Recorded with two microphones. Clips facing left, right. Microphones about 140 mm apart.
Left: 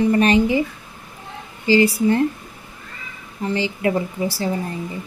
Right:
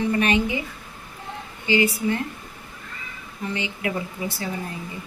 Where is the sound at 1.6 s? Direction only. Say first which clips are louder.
Left 6 dB; 35° left (ahead or behind).